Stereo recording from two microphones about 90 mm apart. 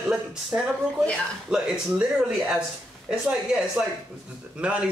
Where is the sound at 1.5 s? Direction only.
10° right (ahead or behind).